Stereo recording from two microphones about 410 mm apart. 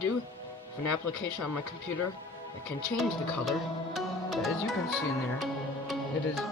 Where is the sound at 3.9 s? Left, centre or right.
Centre.